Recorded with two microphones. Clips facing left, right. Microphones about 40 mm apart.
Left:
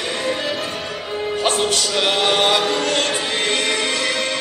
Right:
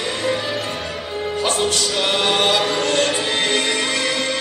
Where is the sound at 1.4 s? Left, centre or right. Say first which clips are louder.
Even; left.